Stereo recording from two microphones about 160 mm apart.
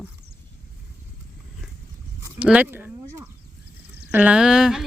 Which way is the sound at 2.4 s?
10° right (ahead or behind).